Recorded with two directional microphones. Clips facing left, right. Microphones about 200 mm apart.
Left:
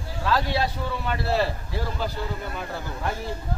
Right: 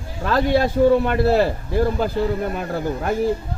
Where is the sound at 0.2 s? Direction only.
50° right (ahead or behind).